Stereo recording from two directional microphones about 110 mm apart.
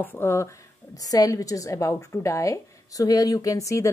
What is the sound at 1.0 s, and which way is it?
A woman's voice, 35° left (ahead or behind).